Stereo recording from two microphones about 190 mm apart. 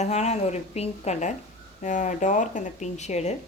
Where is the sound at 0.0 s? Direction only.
35° left (ahead or behind).